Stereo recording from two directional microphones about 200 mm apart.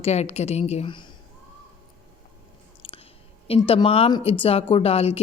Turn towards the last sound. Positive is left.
turn(degrees=30)  # may be behind; listen again after turning